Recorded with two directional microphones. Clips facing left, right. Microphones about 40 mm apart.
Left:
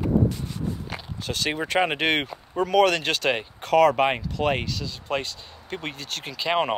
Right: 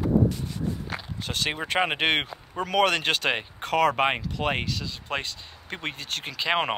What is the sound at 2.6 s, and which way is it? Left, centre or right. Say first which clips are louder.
Speech: left 3 dB; right.